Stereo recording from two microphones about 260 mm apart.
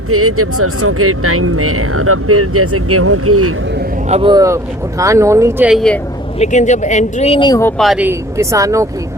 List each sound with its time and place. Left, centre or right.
0.1 s speech: right
4.1 s speech: centre
6.4 s speech: left
7.8 s speech: centre